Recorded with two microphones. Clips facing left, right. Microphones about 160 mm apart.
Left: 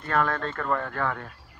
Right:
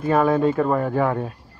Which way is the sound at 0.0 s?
15° right (ahead or behind).